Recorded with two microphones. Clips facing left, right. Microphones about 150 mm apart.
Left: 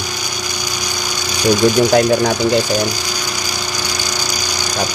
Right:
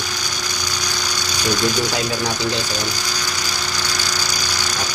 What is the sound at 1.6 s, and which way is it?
Speech, 55° left (ahead or behind).